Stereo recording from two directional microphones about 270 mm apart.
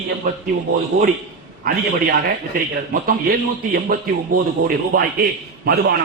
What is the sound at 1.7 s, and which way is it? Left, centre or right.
A man's voice, right.